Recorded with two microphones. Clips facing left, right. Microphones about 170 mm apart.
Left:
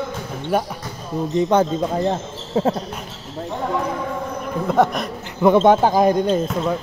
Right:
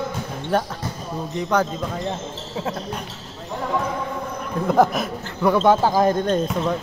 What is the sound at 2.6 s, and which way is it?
Speech, 45° left (ahead or behind).